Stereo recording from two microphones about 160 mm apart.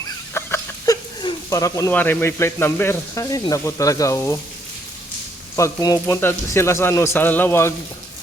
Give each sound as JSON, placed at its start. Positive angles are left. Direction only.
{"t": 0.0, "sound": "chicken", "side_deg": 20}
{"t": 1.5, "sound": "speech", "side_deg": 20}
{"t": 5.5, "sound": "speech", "side_deg": 20}